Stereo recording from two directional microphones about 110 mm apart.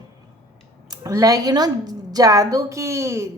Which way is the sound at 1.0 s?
30° right (ahead or behind).